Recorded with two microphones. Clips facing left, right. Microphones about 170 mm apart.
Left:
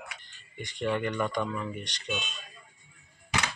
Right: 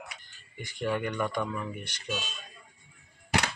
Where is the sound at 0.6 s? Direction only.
10° right (ahead or behind).